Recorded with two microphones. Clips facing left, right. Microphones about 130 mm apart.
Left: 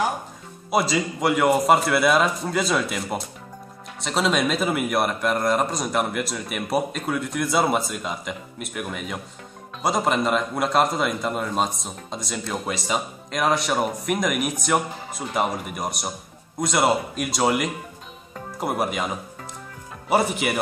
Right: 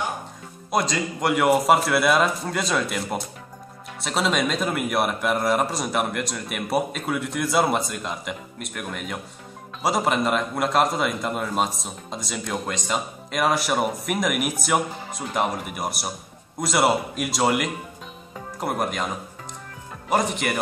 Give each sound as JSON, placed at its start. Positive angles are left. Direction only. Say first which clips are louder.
{"t": 0.7, "sound": "a man's voice", "louder": "left 2 dB", "side_deg": 5}